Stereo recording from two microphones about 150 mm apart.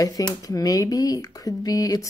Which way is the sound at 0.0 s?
25° left (ahead or behind).